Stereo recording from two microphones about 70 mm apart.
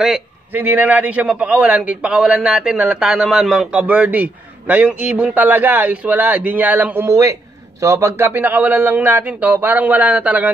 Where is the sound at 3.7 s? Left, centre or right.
Right.